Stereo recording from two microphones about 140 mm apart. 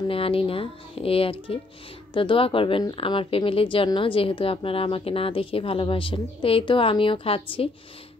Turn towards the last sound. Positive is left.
turn(degrees=40)  # may be behind; listen again after turning